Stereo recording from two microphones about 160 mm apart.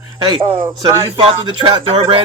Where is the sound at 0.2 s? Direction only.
30° right (ahead or behind).